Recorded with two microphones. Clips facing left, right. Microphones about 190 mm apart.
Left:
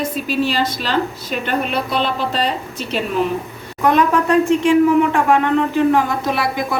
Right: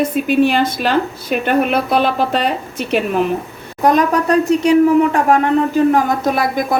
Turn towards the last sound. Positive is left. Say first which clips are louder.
# right 3 dB
turn(degrees=-45)  # may be behind; listen again after turning